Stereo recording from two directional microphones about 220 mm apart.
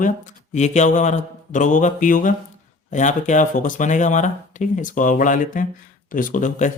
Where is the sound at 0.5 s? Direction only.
30° left (ahead or behind).